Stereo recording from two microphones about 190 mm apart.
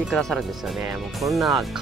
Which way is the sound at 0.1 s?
Centre (ahead or behind).